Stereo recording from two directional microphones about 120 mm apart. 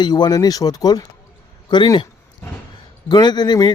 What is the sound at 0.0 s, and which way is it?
A man's voice, 35° left (ahead or behind).